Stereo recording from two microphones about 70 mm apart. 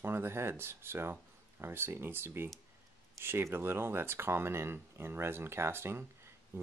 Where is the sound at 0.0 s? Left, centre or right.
Right.